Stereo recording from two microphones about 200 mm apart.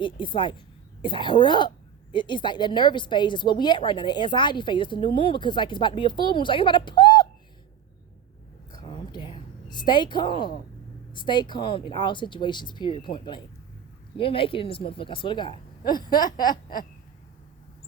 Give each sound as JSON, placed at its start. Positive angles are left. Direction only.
{"t": 0.0, "sound": "a woman's voice", "side_deg": 25}
{"t": 8.7, "sound": "a sound", "side_deg": 20}
{"t": 11.1, "sound": "a woman's voice", "side_deg": 25}